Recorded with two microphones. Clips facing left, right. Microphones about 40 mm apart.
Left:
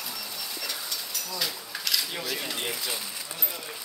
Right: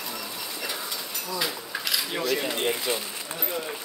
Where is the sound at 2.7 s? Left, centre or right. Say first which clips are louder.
Right 6 dB; right.